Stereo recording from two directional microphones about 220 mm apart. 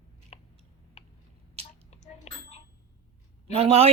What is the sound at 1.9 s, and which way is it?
Bicycle bell, 30° left (ahead or behind).